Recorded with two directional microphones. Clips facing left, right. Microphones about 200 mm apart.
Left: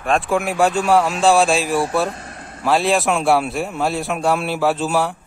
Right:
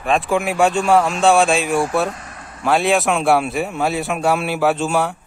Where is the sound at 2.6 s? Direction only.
Centre (ahead or behind).